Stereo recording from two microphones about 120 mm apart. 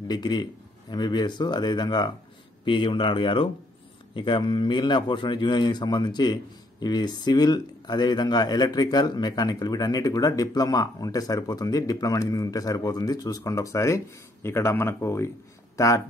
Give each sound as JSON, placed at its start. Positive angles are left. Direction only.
{"t": 0.1, "sound": "a man's voice", "side_deg": 35}